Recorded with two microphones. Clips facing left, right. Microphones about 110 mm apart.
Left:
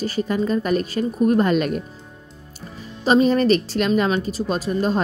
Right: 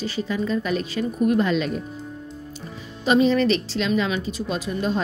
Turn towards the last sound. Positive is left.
turn(degrees=40)  # may be behind; listen again after turning